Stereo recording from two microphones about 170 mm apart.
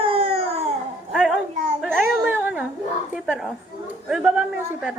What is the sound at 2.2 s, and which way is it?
Cat, 10° right (ahead or behind).